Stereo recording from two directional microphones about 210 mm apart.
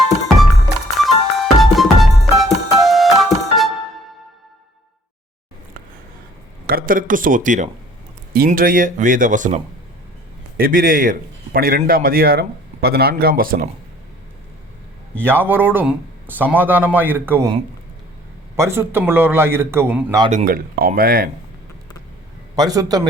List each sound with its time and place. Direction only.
0.9 s music: centre (ahead or behind)
6.7 s speech: 45° right (ahead or behind)
10.6 s a man's voice: 40° right (ahead or behind)
15.2 s a man's voice: 10° right (ahead or behind)
18.5 s a man's voice: 10° right (ahead or behind)
20.3 s a man's voice: 40° right (ahead or behind)
22.5 s a man's voice: 15° right (ahead or behind)